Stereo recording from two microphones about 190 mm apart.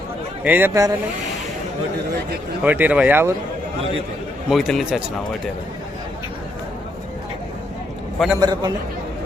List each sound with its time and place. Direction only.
0.4 s speech: 10° right (ahead or behind)
2.6 s speech: 10° right (ahead or behind)
4.4 s speech: centre (ahead or behind)
8.4 s a man's voice: 20° right (ahead or behind)